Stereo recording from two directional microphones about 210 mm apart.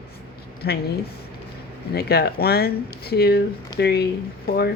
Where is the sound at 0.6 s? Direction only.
50° left (ahead or behind).